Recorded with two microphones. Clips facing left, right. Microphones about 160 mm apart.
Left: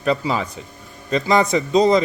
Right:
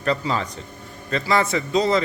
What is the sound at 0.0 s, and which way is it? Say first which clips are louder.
Speech: left 3 dB; 10° left (ahead or behind).